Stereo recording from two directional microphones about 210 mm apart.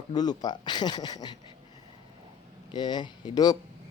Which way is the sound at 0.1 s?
20° left (ahead or behind).